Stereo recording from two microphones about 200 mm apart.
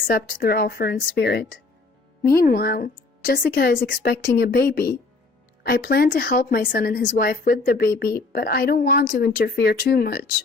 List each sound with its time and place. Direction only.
0.1 s a woman's voice: 50° left (ahead or behind)